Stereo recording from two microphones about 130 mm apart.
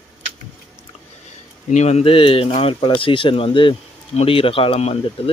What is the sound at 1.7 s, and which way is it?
Speech, 60° left (ahead or behind).